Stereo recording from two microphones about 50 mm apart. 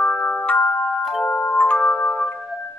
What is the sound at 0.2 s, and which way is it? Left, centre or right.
Music, left.